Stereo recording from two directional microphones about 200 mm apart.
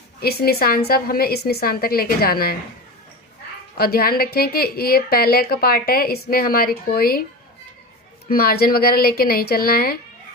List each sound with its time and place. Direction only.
0.2 s a woman's voice: 50° left (ahead or behind)
3.8 s a woman's voice: 50° left (ahead or behind)
8.3 s a woman's voice: 50° left (ahead or behind)